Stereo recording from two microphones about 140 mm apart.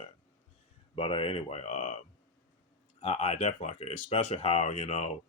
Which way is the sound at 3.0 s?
45° left (ahead or behind).